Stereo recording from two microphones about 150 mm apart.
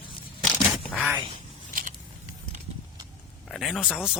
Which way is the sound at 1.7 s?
65° right (ahead or behind).